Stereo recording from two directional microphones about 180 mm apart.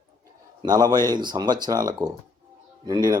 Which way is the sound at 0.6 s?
20° right (ahead or behind).